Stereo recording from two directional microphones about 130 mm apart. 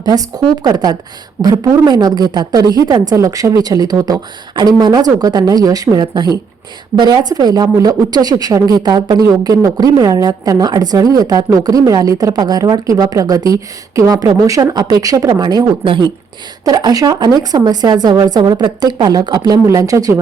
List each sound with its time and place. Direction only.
0.0 s a woman's voice: 30° right (ahead or behind)